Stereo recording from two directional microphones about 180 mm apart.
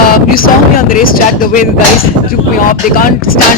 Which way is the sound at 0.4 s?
50° left (ahead or behind).